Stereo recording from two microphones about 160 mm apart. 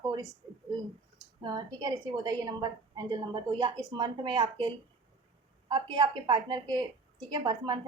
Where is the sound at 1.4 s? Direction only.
25° right (ahead or behind).